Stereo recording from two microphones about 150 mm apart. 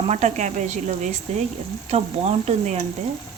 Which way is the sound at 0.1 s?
50° right (ahead or behind).